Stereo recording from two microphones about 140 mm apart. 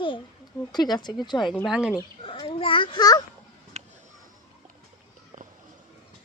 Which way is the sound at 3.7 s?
55° right (ahead or behind).